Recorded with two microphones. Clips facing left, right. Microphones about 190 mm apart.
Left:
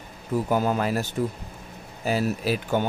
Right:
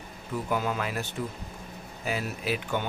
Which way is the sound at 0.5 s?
40° left (ahead or behind).